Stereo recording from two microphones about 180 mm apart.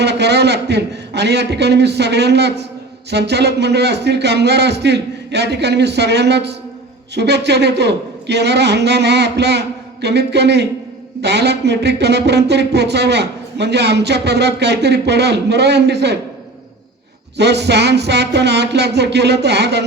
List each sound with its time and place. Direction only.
0.0 s speech: 70° right (ahead or behind)
17.3 s speech: 70° right (ahead or behind)